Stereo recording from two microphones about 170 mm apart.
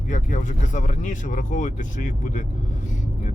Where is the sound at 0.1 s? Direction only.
45° left (ahead or behind).